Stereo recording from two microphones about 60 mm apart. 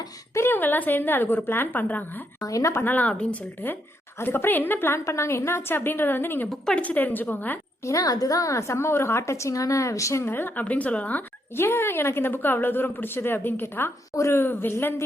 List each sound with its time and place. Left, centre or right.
0.3 s a woman's voice: left
2.4 s a woman's voice: left
2.7 s a woman's voice: left
4.9 s a woman's voice: left
6.7 s a woman's voice: left
7.8 s a woman's voice: left
10.2 s speech: left
11.5 s a woman's voice: left
14.2 s speech: left
14.4 s a woman's voice: left